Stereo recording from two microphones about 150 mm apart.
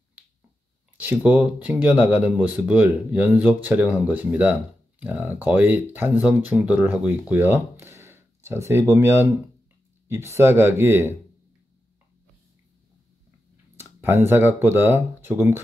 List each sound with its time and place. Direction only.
0.9 s speech: 10° right (ahead or behind)
13.7 s speech: 15° right (ahead or behind)